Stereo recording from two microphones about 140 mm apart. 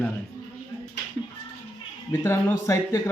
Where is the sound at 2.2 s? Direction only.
20° left (ahead or behind).